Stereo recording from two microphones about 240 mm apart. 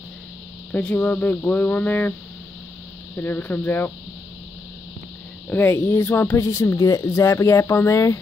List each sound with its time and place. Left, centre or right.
0.7 s speech: centre
3.2 s speech: centre
5.5 s speech: centre